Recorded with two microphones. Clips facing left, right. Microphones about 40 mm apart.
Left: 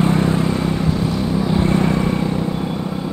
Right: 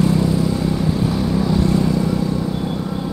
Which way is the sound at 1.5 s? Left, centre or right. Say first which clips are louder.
Left 2 dB; left.